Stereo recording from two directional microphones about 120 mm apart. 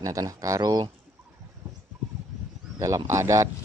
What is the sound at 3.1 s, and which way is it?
Speech, 25° right (ahead or behind).